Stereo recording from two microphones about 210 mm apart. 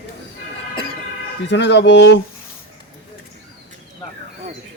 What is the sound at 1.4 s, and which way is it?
Speech, 55° left (ahead or behind).